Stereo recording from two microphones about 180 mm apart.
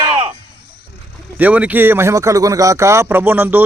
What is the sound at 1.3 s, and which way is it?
Speech, 10° right (ahead or behind).